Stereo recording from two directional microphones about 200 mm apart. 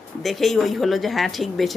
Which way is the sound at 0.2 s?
Centre (ahead or behind).